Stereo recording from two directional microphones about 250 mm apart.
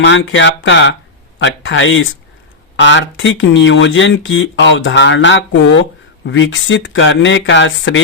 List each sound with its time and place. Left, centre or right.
0.0 s speech: left